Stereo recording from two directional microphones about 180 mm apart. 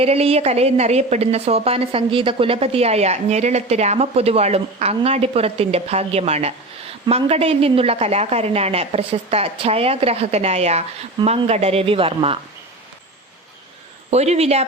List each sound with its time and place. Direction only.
0.0 s a woman's voice: 35° right (ahead or behind)
14.1 s a woman's voice: 35° right (ahead or behind)